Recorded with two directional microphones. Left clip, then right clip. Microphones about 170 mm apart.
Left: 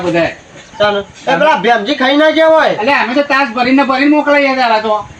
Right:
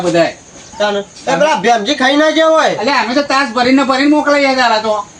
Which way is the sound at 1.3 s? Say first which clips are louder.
Left 1 dB; 25° right (ahead or behind).